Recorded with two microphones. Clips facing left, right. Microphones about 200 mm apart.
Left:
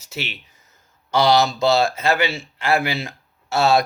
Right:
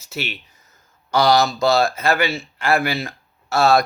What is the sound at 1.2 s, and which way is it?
Speech, 25° left (ahead or behind).